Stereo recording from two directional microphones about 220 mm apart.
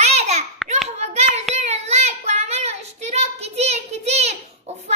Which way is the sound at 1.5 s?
30° right (ahead or behind).